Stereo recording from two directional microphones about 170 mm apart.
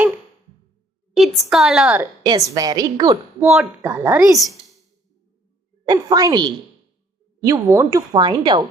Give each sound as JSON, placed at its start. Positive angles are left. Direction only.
{"t": 1.1, "sound": "a woman's voice", "side_deg": 0}
{"t": 2.0, "sound": "a woman's voice", "side_deg": -20}
{"t": 3.5, "sound": "a woman's voice", "side_deg": -5}
{"t": 5.8, "sound": "a woman's voice", "side_deg": -20}